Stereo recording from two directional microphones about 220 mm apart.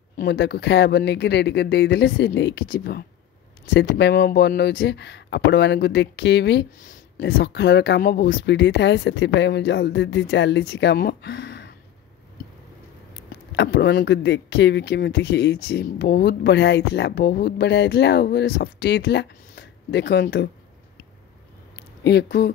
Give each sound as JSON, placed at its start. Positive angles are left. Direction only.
{"t": 0.2, "sound": "speech", "side_deg": 50}
{"t": 13.5, "sound": "speech", "side_deg": 50}
{"t": 22.0, "sound": "speech", "side_deg": 50}